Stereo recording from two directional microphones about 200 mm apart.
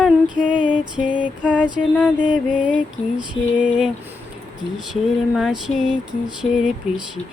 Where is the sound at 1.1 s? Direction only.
5° right (ahead or behind).